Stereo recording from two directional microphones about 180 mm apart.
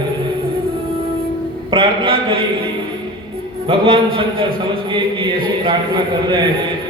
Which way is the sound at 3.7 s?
30° right (ahead or behind).